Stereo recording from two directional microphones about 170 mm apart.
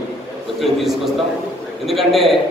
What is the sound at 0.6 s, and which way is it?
A man's voice, centre (ahead or behind).